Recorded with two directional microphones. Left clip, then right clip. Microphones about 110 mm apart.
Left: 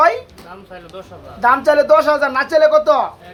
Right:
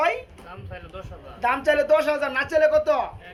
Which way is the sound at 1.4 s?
5° left (ahead or behind).